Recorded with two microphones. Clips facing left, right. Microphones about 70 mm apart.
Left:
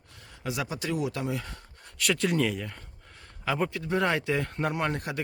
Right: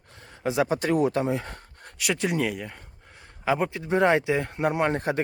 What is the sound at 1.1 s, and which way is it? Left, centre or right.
Speech, right.